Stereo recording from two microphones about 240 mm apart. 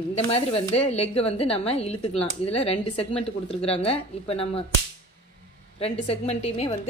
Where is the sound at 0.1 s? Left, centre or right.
Left.